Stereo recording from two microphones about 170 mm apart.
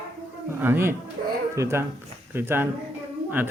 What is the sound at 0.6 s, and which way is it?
Speech, 15° right (ahead or behind).